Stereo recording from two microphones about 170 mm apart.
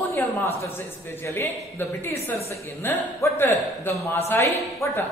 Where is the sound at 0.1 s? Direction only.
15° left (ahead or behind).